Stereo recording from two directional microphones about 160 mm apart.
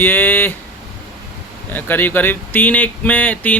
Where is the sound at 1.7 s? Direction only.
10° left (ahead or behind).